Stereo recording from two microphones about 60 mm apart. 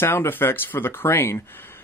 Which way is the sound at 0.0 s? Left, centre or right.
Left.